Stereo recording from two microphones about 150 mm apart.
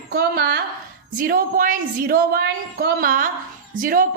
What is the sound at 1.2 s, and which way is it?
A woman's voice, 70° right (ahead or behind).